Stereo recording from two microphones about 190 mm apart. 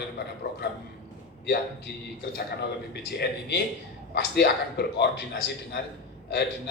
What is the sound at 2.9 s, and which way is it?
A man's voice, 60° left (ahead or behind).